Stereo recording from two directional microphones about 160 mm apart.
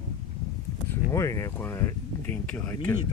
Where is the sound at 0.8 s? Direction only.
20° left (ahead or behind).